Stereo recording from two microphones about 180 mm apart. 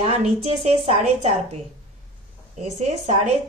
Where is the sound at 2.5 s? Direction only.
40° right (ahead or behind).